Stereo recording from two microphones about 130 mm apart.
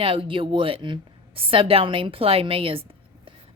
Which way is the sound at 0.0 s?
45° right (ahead or behind).